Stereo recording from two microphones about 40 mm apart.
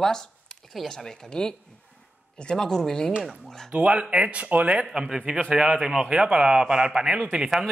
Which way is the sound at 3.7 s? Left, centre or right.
Right.